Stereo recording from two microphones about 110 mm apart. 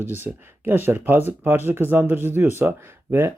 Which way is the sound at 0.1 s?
20° right (ahead or behind).